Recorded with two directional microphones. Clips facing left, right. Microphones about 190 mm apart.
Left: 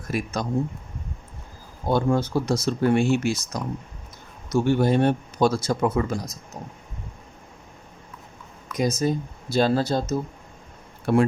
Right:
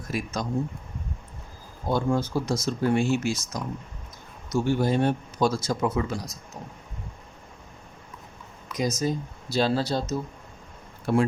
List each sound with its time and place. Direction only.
0.1 s speech: 60° left (ahead or behind)
1.9 s speech: 65° left (ahead or behind); by 6.3 s 45° left (ahead or behind)
8.8 s speech: 55° left (ahead or behind)
11.0 s speech: 60° left (ahead or behind)